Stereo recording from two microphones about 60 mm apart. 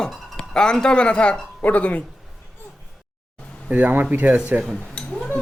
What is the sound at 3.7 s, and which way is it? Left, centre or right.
Speech, right.